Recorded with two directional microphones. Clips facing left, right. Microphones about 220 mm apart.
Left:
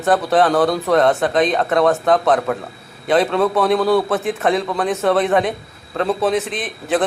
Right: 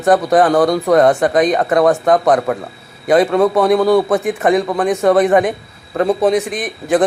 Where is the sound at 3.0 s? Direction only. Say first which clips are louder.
Right 4 dB; centre (ahead or behind).